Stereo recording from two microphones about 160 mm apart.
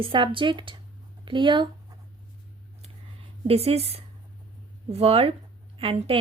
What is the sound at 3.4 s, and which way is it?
A woman's voice, 40° right (ahead or behind).